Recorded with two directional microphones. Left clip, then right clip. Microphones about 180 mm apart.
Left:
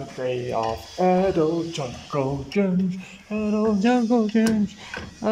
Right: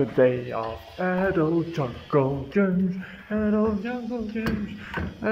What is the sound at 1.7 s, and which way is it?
Speech, centre (ahead or behind).